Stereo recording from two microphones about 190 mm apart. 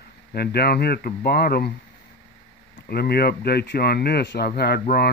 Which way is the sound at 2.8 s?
55° left (ahead or behind).